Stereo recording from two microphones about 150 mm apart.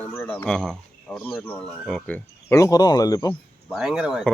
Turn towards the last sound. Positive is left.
turn(degrees=-5)  # may be behind; listen again after turning